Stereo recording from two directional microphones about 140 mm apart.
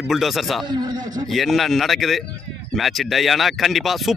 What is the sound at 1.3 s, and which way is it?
A man's voice, centre (ahead or behind).